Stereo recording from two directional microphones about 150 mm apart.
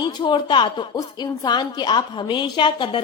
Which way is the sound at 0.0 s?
30° left (ahead or behind).